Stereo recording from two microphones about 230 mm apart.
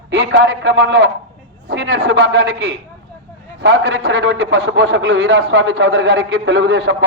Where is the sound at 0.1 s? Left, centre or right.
Right.